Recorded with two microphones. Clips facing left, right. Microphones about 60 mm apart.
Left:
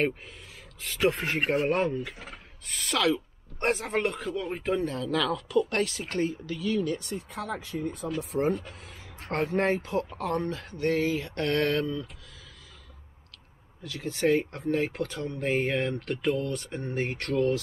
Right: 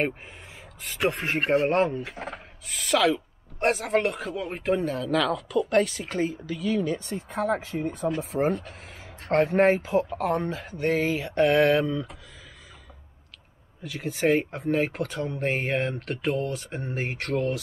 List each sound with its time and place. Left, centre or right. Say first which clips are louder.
1.0 s speech: right 1 dB; right
1.7 s speech: right 3 dB; centre
2.1 s speech: right 8 dB; right
2.6 s speech: right 4 dB; centre
7.4 s speech: right 7 dB; right
8.5 s speech: right 2 dB; centre
14.0 s speech: right 2 dB; centre